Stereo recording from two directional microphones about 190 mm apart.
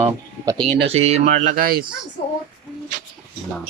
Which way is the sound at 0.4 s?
20° right (ahead or behind).